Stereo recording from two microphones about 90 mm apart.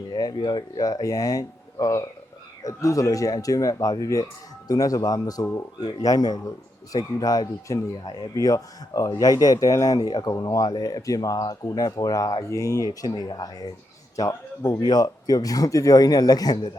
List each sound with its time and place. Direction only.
0.1 s speech: 50° left (ahead or behind)
8.4 s speech: 40° left (ahead or behind)
14.2 s speech: 40° left (ahead or behind)
14.8 s speech: 50° left (ahead or behind)